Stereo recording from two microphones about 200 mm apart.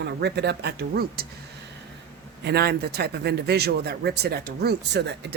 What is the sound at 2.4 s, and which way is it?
Speech, 55° right (ahead or behind).